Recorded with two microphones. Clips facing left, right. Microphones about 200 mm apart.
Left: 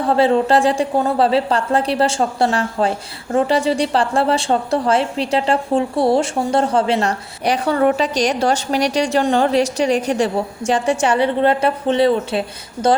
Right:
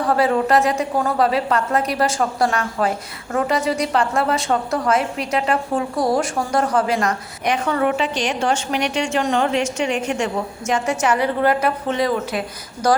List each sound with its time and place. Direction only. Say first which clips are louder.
0.1 s a woman's voice: left 3 dB; 25° left (ahead or behind)